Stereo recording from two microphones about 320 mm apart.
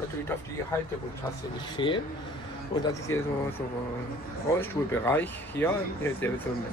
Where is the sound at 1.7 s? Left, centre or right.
Centre.